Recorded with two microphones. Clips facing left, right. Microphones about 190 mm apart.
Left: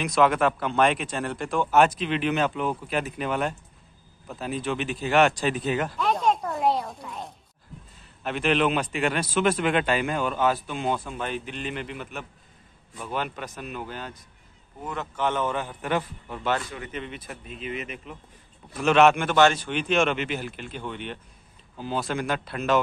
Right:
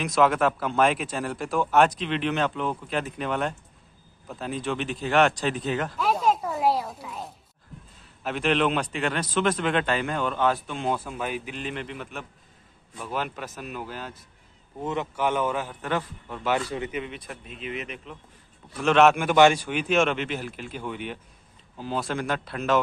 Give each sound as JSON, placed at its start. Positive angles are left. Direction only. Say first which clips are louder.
{"t": 0.0, "sound": "a man's voice", "louder": "even", "side_deg": 0}
{"t": 5.9, "sound": "a sound", "louder": "right 3 dB", "side_deg": -5}
{"t": 8.2, "sound": "a man's voice", "louder": "even", "side_deg": 0}
{"t": 14.8, "sound": "a man's voice", "louder": "right 5 dB", "side_deg": -25}
{"t": 15.1, "sound": "a man's voice", "louder": "left 1 dB", "side_deg": -10}
{"t": 15.8, "sound": "a man's voice", "louder": "left 3 dB", "side_deg": 15}
{"t": 16.9, "sound": "a man's voice", "louder": "right 2 dB", "side_deg": 0}